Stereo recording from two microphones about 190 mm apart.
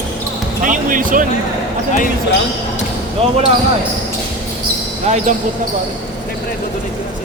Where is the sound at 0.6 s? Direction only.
45° right (ahead or behind).